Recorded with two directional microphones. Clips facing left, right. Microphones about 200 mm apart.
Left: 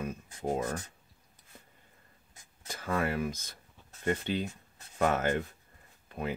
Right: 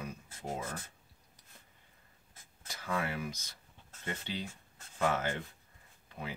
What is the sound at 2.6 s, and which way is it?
Speech, 50° left (ahead or behind).